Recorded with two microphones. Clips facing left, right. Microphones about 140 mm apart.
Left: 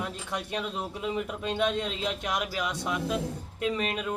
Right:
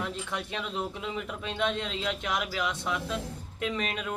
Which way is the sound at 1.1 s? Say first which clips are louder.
Left 4 dB; 15° left (ahead or behind).